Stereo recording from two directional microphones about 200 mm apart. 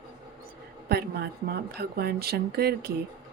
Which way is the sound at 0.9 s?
55° right (ahead or behind).